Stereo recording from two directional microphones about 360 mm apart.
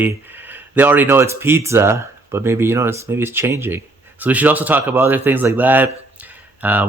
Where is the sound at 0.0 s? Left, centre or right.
Centre.